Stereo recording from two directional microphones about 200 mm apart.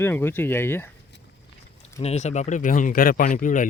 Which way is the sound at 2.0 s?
35° left (ahead or behind).